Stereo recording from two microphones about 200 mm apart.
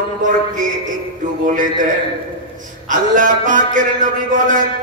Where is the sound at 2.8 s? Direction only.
40° right (ahead or behind).